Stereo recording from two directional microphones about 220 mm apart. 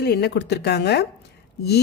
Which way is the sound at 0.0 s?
50° left (ahead or behind).